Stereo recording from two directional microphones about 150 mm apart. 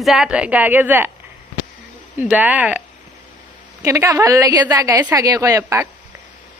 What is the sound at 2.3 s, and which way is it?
Speech, 10° right (ahead or behind).